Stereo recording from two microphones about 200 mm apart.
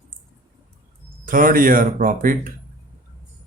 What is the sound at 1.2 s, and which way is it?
Speech, 45° right (ahead or behind).